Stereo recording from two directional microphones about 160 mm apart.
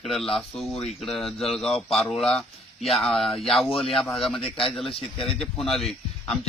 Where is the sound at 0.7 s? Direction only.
40° left (ahead or behind).